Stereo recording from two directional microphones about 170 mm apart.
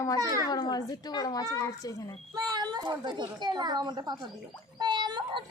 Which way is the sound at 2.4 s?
25° right (ahead or behind).